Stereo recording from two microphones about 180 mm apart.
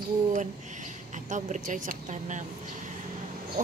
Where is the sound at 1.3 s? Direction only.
45° right (ahead or behind).